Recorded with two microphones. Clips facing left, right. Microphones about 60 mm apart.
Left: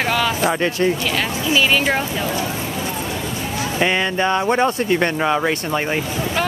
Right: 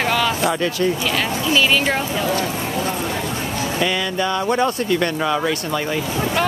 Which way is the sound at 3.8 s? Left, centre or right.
Left.